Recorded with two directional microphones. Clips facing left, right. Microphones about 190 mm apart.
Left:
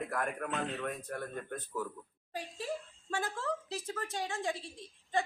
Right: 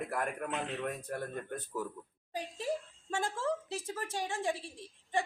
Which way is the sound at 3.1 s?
20° right (ahead or behind).